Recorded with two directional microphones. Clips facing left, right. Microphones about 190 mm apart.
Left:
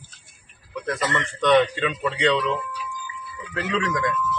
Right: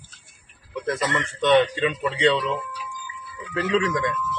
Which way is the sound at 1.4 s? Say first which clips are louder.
Even; 25° right (ahead or behind).